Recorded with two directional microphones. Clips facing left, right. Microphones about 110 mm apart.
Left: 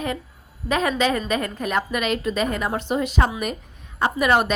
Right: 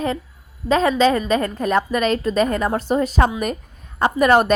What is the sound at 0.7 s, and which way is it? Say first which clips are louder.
A woman's voice: right 5 dB; 30° right (ahead or behind).